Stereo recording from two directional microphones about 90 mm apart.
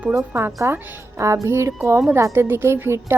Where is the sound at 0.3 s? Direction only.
25° right (ahead or behind).